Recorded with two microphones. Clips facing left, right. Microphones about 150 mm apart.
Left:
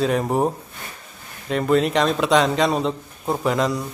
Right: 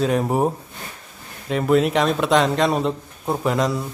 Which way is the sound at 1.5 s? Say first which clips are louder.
Right 1 dB; 5° right (ahead or behind).